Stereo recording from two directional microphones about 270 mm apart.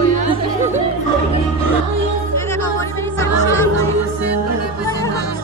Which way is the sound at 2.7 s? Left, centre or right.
Centre.